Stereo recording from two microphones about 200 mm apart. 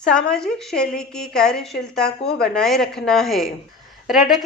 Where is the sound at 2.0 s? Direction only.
50° left (ahead or behind).